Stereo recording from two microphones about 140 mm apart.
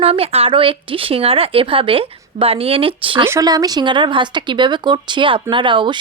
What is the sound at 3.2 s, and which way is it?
Speech, 20° right (ahead or behind).